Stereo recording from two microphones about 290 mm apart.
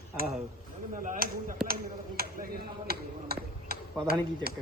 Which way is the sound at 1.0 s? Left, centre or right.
Right.